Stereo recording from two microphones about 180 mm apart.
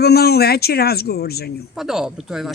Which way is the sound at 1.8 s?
Centre (ahead or behind).